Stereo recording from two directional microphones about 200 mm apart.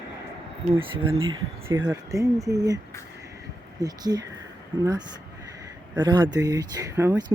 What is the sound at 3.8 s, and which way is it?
Speech, 20° right (ahead or behind).